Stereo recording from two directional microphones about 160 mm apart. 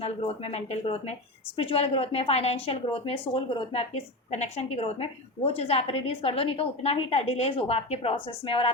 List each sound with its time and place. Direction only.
0.0 s a woman's voice: 35° left (ahead or behind)